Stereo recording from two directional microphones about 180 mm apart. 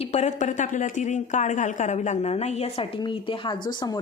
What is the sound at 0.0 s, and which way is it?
Speech, 35° left (ahead or behind).